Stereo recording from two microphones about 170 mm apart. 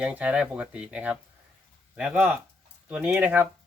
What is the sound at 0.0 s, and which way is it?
Speech, 5° right (ahead or behind).